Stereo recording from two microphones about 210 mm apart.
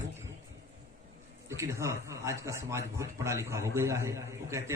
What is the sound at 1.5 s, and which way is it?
A man's voice, 15° right (ahead or behind).